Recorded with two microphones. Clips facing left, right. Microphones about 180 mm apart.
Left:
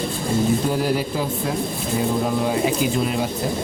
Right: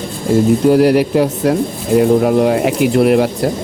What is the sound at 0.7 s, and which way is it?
Speech, 70° right (ahead or behind).